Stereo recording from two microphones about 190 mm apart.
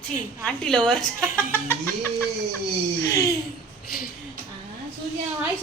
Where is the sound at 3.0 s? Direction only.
15° left (ahead or behind).